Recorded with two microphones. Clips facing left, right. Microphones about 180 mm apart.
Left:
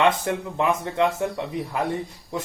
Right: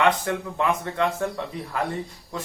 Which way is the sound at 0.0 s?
20° left (ahead or behind).